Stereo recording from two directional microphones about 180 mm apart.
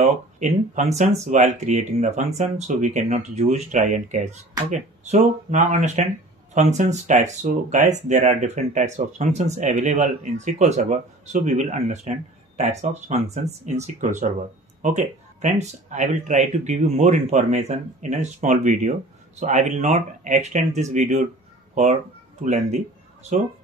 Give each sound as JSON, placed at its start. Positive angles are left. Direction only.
{"t": 0.0, "sound": "speech", "side_deg": -40}
{"t": 22.4, "sound": "speech", "side_deg": -40}